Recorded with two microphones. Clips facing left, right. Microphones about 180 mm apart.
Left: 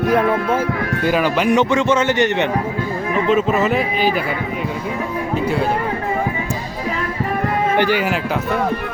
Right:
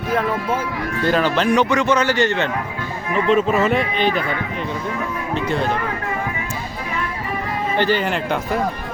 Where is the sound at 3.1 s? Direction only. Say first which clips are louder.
Even; centre (ahead or behind).